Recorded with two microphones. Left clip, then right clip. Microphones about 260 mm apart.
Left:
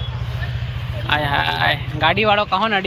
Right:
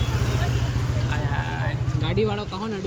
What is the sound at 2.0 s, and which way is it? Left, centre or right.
Speech, centre.